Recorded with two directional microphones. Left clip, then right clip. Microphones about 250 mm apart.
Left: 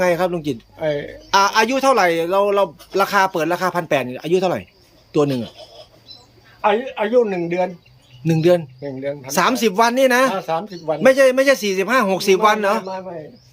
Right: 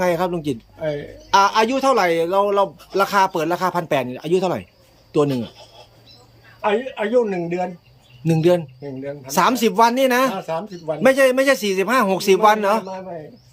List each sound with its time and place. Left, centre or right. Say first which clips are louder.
0.0 s speech: left 2 dB; centre
6.6 s speech: left 3 dB; centre